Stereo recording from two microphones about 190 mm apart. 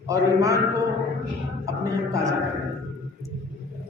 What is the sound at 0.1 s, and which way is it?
Speech, 15° right (ahead or behind).